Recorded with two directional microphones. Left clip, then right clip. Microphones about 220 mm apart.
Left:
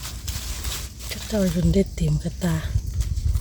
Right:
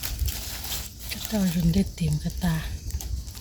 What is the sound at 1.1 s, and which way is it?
Speech, 45° left (ahead or behind).